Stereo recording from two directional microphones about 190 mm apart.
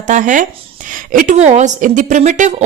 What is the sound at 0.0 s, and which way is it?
A woman's voice, 40° right (ahead or behind).